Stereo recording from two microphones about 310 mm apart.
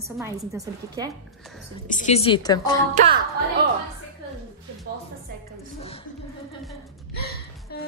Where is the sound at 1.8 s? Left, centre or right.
Left.